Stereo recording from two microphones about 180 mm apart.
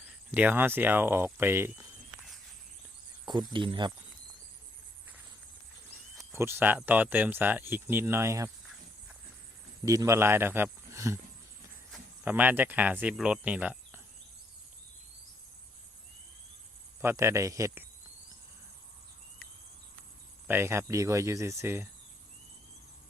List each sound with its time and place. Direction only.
0.0 s speech: 10° right (ahead or behind)
3.5 s speech: 25° right (ahead or behind)
6.3 s speech: 15° right (ahead or behind)
9.8 s a man's voice: 20° right (ahead or behind)
12.2 s speech: 10° right (ahead or behind)
17.0 s speech: 15° right (ahead or behind)
20.5 s speech: 15° right (ahead or behind)